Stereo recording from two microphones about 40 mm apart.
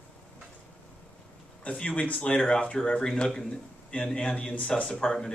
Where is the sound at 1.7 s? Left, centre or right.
Left.